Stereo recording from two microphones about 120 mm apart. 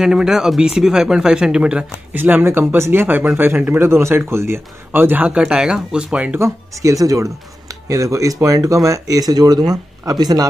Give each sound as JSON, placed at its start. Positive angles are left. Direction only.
{"t": 0.0, "sound": "speech", "side_deg": -5}
{"t": 6.4, "sound": "speech", "side_deg": -25}